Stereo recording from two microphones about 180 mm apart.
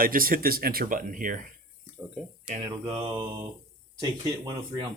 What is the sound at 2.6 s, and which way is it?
Speech, 25° right (ahead or behind).